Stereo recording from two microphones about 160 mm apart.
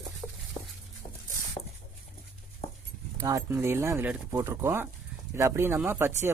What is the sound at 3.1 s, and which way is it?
Speech, 20° right (ahead or behind).